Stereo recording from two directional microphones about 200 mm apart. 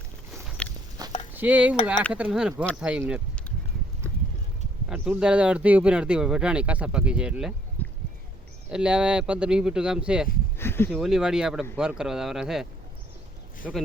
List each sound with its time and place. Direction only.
0.4 s walk: 5° left (ahead or behind)
1.0 s a sound: 20° right (ahead or behind)
1.4 s speech: 5° right (ahead or behind)
4.9 s speech: 5° right (ahead or behind)
7.8 s a sound: 10° left (ahead or behind)
8.7 s speech: 5° right (ahead or behind)
10.6 s speech: 10° left (ahead or behind)
10.9 s speech: centre (ahead or behind)
13.6 s speech: 5° right (ahead or behind)